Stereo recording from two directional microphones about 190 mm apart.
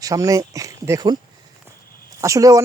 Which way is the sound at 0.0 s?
15° right (ahead or behind).